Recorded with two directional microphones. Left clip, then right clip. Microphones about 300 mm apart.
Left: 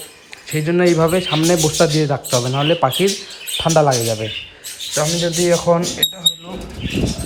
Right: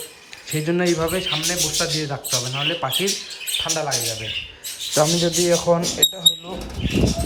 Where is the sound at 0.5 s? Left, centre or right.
Centre.